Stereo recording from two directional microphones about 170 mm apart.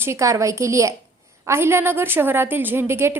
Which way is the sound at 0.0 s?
15° right (ahead or behind).